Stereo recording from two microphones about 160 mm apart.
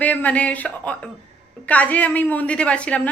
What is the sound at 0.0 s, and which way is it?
A woman's voice, 10° left (ahead or behind).